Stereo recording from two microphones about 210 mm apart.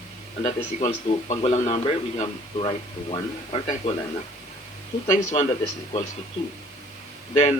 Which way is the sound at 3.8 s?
25° left (ahead or behind).